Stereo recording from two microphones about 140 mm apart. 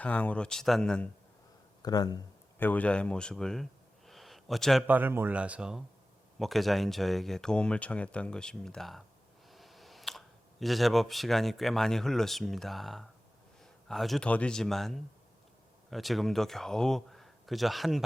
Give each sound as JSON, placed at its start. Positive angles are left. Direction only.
{"t": 0.0, "sound": "speech", "side_deg": 10}
{"t": 1.8, "sound": "speech", "side_deg": 30}
{"t": 2.6, "sound": "speech", "side_deg": 10}
{"t": 4.9, "sound": "a man's voice", "side_deg": -15}